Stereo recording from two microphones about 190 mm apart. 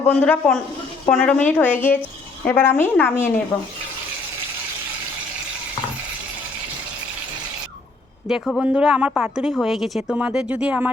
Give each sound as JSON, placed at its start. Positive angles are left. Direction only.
{"t": 0.1, "sound": "a woman's voice", "side_deg": 5}
{"t": 8.3, "sound": "speech", "side_deg": 0}